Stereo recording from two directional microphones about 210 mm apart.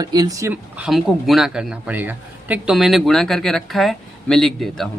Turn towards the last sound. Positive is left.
turn(degrees=0)  # may be behind; listen again after turning